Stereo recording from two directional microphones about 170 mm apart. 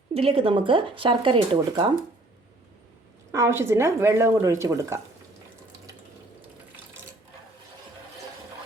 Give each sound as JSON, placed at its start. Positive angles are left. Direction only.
{"t": 0.1, "sound": "speech", "side_deg": -35}
{"t": 3.3, "sound": "speech", "side_deg": -15}